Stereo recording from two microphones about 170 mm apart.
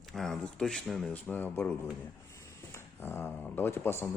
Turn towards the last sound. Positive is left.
turn(degrees=15)  # may be behind; listen again after turning